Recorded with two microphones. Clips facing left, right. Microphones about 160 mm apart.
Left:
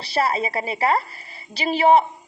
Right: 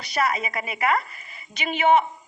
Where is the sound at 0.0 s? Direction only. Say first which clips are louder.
Left 3 dB; 30° left (ahead or behind).